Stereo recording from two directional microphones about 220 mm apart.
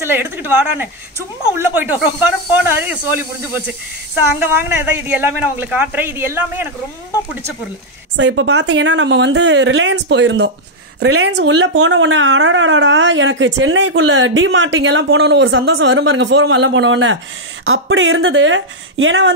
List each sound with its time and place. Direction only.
0.0 s speech: 10° right (ahead or behind)
8.2 s speech: 55° right (ahead or behind)